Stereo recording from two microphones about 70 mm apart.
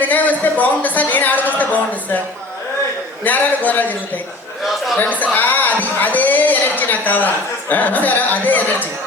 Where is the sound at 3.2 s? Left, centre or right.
Left.